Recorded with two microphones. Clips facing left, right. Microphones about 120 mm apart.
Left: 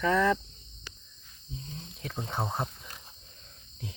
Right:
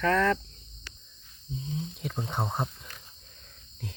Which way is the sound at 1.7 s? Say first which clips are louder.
Right 5 dB; 5° right (ahead or behind).